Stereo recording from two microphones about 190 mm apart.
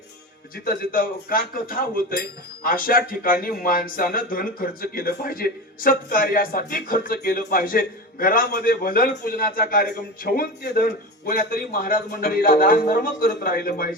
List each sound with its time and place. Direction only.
0.5 s speech: 50° left (ahead or behind)